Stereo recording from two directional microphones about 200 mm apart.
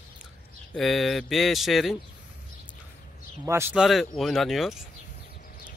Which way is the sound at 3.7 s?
Centre (ahead or behind).